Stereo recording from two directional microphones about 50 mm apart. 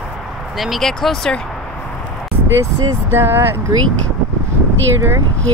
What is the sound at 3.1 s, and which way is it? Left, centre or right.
Speech, right.